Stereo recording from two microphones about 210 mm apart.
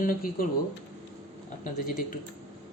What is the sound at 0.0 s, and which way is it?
Speech, 40° left (ahead or behind).